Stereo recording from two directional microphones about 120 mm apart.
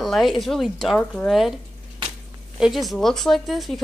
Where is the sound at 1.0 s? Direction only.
10° left (ahead or behind).